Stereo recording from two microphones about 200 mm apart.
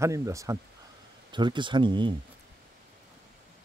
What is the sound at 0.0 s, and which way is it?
Speech, 15° right (ahead or behind).